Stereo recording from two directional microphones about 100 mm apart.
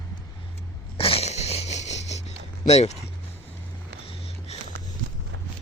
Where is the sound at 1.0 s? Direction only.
75° left (ahead or behind); by 2.9 s 90° left.